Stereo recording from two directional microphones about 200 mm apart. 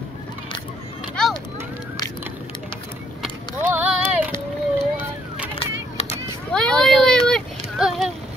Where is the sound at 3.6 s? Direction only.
10° right (ahead or behind).